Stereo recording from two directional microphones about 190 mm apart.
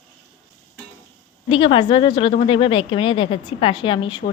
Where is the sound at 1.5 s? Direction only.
25° left (ahead or behind).